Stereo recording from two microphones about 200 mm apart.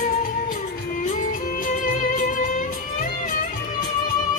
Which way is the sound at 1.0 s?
45° left (ahead or behind).